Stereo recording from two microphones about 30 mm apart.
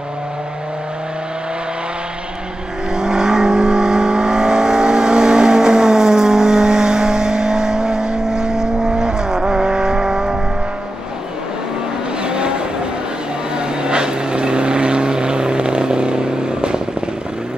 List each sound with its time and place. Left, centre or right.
2.9 s vehicle: right
12.2 s vehicle: right